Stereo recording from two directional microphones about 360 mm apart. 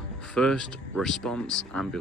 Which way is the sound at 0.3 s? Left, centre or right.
Centre.